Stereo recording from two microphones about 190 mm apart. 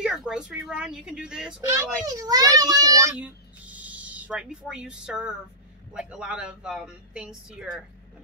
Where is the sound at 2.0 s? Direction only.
20° right (ahead or behind).